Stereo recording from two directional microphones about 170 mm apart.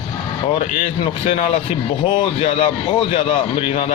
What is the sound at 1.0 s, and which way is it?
A man's voice, 30° left (ahead or behind).